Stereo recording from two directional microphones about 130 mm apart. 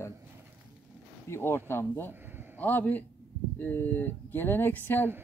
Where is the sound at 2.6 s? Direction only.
15° left (ahead or behind).